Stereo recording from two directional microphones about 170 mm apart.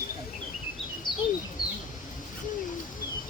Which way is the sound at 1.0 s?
25° left (ahead or behind).